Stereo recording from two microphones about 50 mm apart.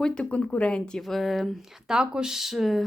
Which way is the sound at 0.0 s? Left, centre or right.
Centre.